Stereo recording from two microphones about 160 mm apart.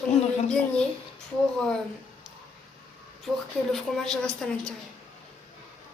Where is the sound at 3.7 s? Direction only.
Centre (ahead or behind).